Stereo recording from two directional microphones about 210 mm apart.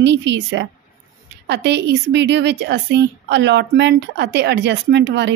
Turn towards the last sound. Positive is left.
turn(degrees=-55)  # may be behind; listen again after turning